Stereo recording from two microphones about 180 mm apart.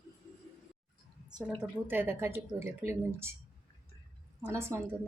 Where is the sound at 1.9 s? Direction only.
10° right (ahead or behind).